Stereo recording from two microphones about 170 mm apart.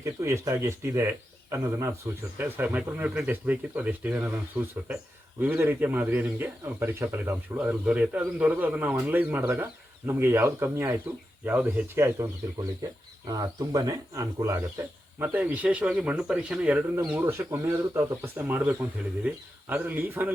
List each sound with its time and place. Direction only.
0.0 s speech: 15° right (ahead or behind)